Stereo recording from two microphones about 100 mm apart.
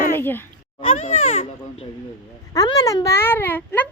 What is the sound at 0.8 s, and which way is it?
Speech, 65° left (ahead or behind).